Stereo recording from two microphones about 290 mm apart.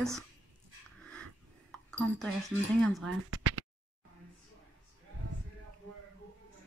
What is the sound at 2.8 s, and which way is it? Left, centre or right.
Speech, centre.